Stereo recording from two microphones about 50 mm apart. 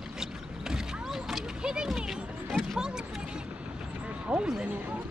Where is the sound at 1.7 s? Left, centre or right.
Centre.